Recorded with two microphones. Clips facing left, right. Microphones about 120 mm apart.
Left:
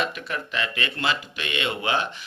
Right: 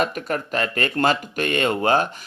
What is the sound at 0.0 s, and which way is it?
Speech, 45° right (ahead or behind).